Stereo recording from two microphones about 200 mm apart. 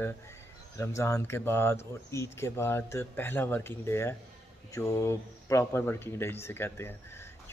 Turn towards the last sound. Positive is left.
turn(degrees=10)  # may be behind; listen again after turning